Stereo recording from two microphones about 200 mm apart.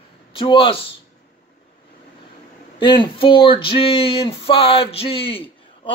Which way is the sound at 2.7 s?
25° left (ahead or behind).